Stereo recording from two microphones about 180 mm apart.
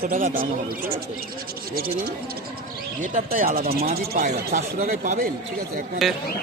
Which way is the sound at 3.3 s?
50° right (ahead or behind).